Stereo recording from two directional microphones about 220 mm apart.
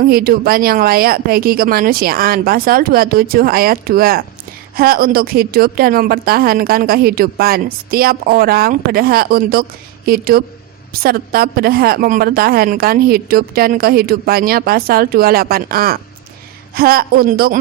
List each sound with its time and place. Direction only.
0.0 s a woman's voice: 40° right (ahead or behind)